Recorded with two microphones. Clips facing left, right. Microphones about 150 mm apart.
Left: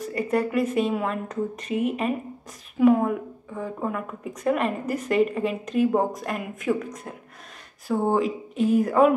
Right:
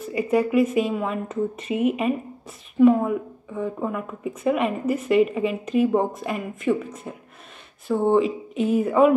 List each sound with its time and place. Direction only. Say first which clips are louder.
0.0 s speech: right 3 dB; 5° right (ahead or behind)